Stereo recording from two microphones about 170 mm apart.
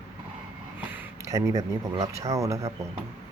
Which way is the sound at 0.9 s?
15° right (ahead or behind).